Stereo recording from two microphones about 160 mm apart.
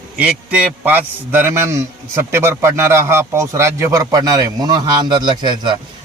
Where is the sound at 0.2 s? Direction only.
5° right (ahead or behind).